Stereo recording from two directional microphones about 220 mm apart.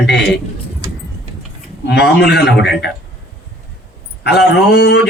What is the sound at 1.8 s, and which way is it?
Speech, 50° left (ahead or behind).